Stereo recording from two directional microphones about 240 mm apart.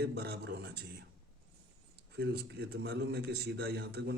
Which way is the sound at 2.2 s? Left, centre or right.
Right.